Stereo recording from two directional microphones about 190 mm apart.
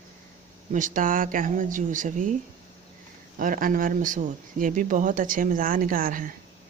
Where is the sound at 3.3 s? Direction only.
45° right (ahead or behind).